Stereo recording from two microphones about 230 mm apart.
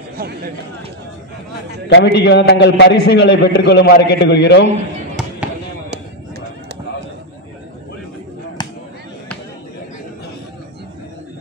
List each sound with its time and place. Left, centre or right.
0.2 s chatter: right
1.9 s a man's voice: left
8.6 s a sound: centre